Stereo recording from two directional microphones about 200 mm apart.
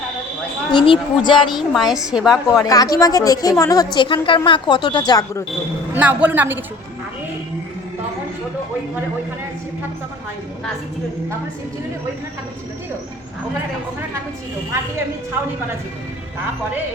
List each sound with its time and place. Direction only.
0.7 s a woman's voice: 25° left (ahead or behind)
1.5 s a woman's voice: centre (ahead or behind)
2.6 s a woman's voice: 15° left (ahead or behind)
5.9 s a woman's voice: 10° right (ahead or behind)